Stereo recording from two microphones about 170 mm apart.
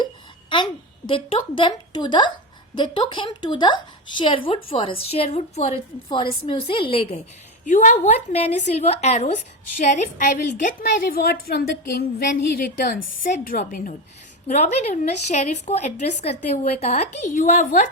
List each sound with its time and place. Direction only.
0.5 s a woman's voice: 30° left (ahead or behind)
7.6 s a woman's voice: 50° left (ahead or behind)
14.4 s a woman's voice: 40° left (ahead or behind)